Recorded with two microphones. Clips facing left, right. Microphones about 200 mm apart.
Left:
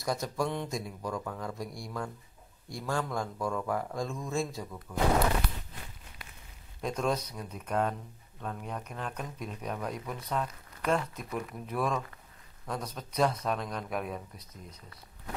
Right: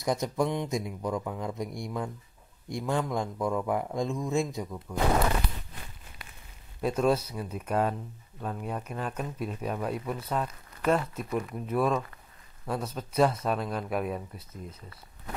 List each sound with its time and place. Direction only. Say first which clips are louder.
0.0 s speech: right 4 dB; 20° right (ahead or behind)
6.8 s speech: right 5 dB; 5° right (ahead or behind)